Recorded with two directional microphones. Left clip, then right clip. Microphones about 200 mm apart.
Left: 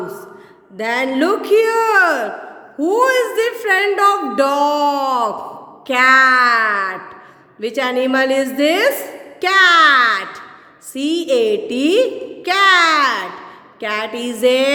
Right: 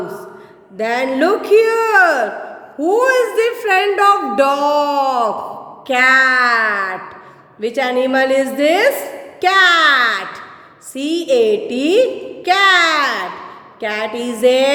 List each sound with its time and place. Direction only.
0.8 s speech: 15° left (ahead or behind)